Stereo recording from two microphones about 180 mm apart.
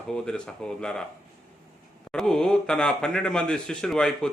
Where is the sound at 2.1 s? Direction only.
5° left (ahead or behind).